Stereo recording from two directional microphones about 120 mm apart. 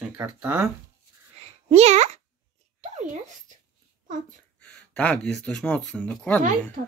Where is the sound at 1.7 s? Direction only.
65° right (ahead or behind).